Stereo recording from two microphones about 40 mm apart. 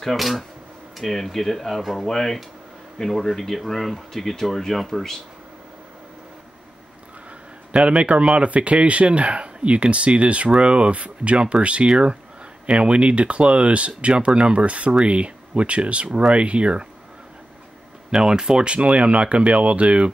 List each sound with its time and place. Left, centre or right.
0.0 s speech: centre
2.0 s speech: centre
7.7 s speech: right
18.1 s speech: centre